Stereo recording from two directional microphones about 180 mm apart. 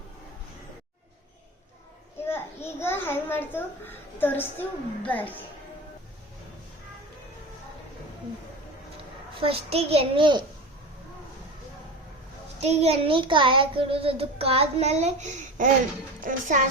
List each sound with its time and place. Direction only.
2.2 s a child's voice: 15° left (ahead or behind)
9.4 s child singing: 35° right (ahead or behind)
12.6 s child singing: 35° right (ahead or behind)
16.2 s a child's voice: 45° right (ahead or behind)